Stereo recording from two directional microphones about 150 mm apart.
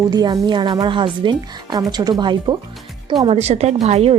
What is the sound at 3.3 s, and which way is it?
Speech, 45° right (ahead or behind).